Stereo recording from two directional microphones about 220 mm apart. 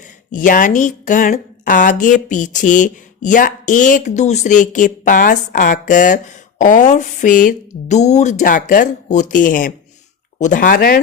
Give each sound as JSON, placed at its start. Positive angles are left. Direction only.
{"t": 0.3, "sound": "speech", "side_deg": 35}